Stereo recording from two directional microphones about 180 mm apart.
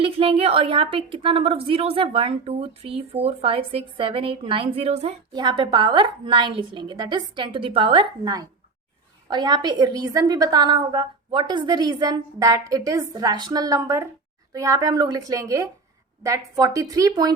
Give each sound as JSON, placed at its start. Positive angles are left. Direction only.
{"t": 0.0, "sound": "a woman's voice", "side_deg": -30}
{"t": 5.3, "sound": "a woman's voice", "side_deg": -25}